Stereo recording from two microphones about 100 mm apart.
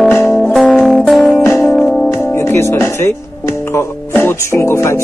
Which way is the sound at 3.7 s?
25° left (ahead or behind).